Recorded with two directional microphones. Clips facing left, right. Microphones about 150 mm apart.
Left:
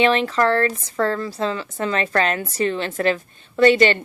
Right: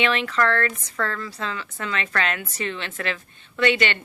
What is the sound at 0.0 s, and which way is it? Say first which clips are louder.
Speech: left 5 dB; 35° left (ahead or behind).